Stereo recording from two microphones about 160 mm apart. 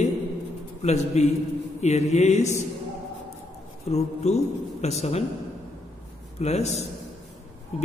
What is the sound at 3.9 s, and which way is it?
A man's voice, 45° left (ahead or behind).